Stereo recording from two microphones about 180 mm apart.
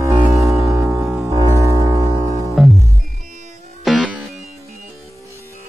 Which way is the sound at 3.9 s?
Centre (ahead or behind).